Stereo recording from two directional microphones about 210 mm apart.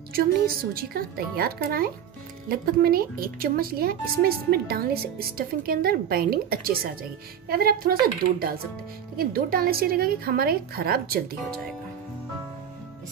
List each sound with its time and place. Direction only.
0.1 s a woman's voice: 45° right (ahead or behind)